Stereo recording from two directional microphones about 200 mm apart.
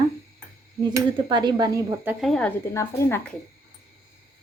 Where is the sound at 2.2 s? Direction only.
Centre (ahead or behind).